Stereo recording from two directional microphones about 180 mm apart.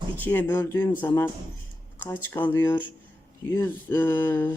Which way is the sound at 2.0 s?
10° left (ahead or behind).